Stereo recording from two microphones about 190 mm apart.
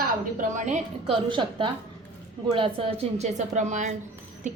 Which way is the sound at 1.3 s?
25° right (ahead or behind).